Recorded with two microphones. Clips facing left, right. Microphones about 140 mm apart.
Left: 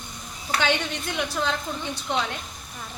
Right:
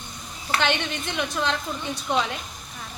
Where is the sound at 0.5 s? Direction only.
Centre (ahead or behind).